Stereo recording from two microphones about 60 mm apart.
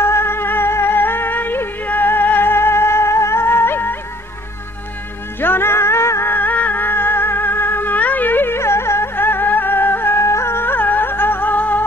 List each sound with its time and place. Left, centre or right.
0.0 s music: left
5.4 s music: left
6.3 s music: left